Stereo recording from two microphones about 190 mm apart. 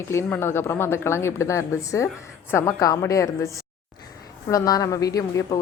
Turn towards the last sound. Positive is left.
turn(degrees=20)  # may be behind; listen again after turning